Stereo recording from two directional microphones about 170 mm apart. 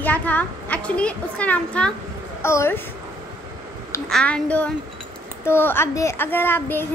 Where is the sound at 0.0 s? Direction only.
10° left (ahead or behind).